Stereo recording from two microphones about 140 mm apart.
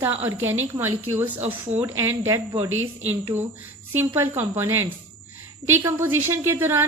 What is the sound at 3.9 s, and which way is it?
A woman's voice, 15° right (ahead or behind).